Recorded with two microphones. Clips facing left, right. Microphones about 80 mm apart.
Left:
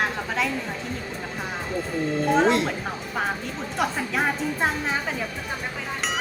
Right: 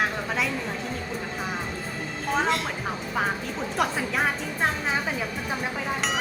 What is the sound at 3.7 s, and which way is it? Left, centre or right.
Speech, centre.